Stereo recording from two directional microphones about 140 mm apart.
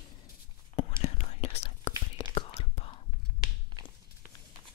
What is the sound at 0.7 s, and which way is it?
Whispering, 45° left (ahead or behind).